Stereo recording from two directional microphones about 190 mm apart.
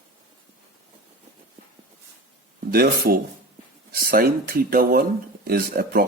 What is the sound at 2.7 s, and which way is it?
Speech, 55° right (ahead or behind).